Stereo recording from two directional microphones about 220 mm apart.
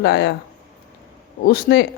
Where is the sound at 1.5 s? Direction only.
45° left (ahead or behind).